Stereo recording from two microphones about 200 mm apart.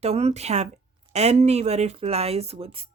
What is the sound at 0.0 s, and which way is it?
Speech, 30° right (ahead or behind).